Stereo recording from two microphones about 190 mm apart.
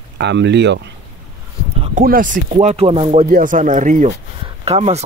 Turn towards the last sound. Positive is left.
turn(degrees=-35)  # may be behind; listen again after turning